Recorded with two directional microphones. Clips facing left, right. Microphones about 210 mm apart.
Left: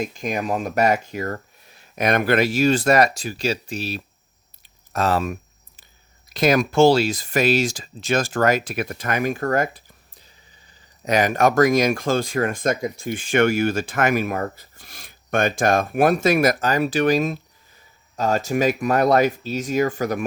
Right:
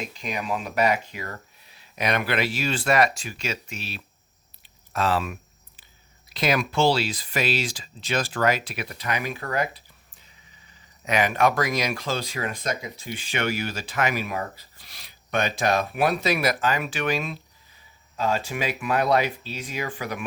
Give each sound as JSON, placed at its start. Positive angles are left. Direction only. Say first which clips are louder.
{"t": 0.1, "sound": "speech", "louder": "left 5 dB", "side_deg": 45}
{"t": 4.6, "sound": "chewing", "louder": "left 3 dB", "side_deg": 45}
{"t": 6.3, "sound": "speech", "louder": "left 6 dB", "side_deg": 45}